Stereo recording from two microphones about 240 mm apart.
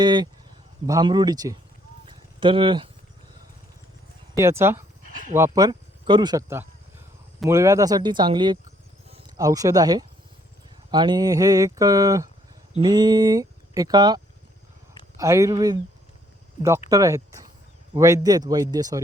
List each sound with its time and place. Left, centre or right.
0.0 s speech: centre
2.0 s a sound: centre
4.4 s speech: centre
15.2 s speech: centre